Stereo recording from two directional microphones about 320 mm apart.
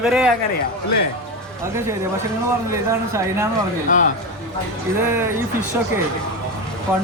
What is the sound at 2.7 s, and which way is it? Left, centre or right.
Speech, centre.